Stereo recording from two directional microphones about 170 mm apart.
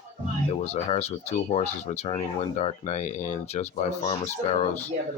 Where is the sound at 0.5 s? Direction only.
40° left (ahead or behind).